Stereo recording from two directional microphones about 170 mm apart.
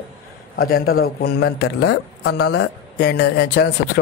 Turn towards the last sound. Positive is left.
turn(degrees=75)  # may be behind; listen again after turning